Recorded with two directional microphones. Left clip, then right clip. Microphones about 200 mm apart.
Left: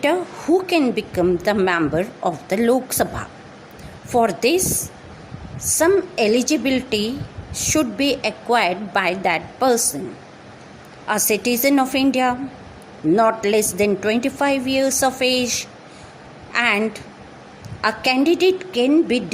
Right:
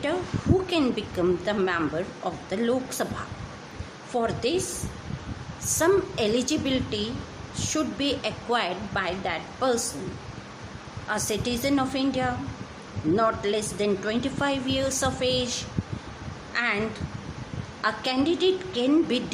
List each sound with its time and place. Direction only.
0.7 s a woman's voice: 30° left (ahead or behind)
5.7 s a woman's voice: 25° left (ahead or behind)
11.1 s a woman's voice: 35° left (ahead or behind)